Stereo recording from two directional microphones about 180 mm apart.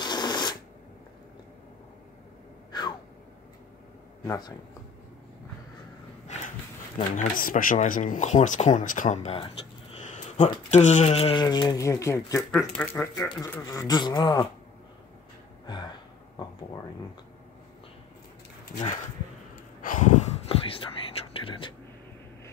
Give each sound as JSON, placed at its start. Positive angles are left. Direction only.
{"t": 0.0, "sound": "a sound", "side_deg": 25}
{"t": 2.7, "sound": "gasp", "side_deg": 25}
{"t": 4.3, "sound": "speech", "side_deg": 20}
{"t": 7.2, "sound": "speech", "side_deg": 50}
{"t": 11.4, "sound": "speech", "side_deg": 20}
{"t": 12.7, "sound": "speech", "side_deg": 5}
{"t": 13.1, "sound": "speech", "side_deg": 20}
{"t": 15.6, "sound": "gasp", "side_deg": 25}
{"t": 19.8, "sound": "whispering", "side_deg": 45}